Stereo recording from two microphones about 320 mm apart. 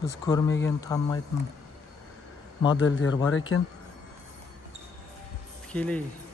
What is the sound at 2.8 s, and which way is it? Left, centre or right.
Speech, left.